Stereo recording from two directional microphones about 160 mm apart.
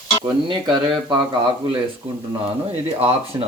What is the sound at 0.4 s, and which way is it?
Speech, 30° right (ahead or behind).